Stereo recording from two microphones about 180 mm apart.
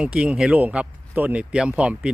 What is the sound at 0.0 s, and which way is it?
Speech, 5° right (ahead or behind).